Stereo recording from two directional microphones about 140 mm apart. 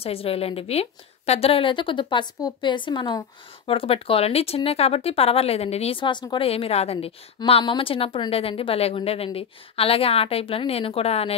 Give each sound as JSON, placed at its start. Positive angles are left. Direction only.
{"t": 0.0, "sound": "a woman's voice", "side_deg": 45}